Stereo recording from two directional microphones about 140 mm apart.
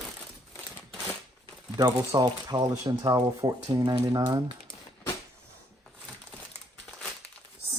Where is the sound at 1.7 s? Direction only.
30° right (ahead or behind).